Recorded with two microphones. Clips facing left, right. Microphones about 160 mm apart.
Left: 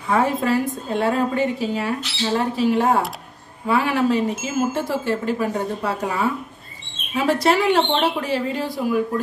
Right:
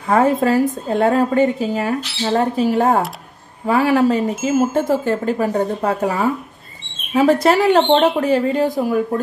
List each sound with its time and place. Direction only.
0.1 s a woman's voice: 45° right (ahead or behind)